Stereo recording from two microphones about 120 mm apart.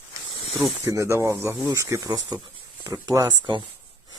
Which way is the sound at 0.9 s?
25° right (ahead or behind).